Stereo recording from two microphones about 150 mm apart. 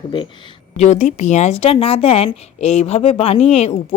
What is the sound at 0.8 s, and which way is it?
Speech, 50° left (ahead or behind).